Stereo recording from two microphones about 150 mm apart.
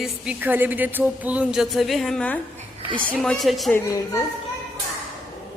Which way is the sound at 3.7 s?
20° left (ahead or behind).